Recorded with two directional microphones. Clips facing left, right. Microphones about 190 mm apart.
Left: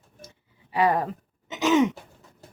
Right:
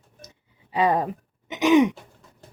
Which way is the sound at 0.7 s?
20° right (ahead or behind).